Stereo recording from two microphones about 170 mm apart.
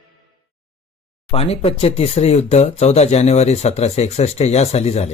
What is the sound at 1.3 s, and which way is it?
Speech, 35° left (ahead or behind).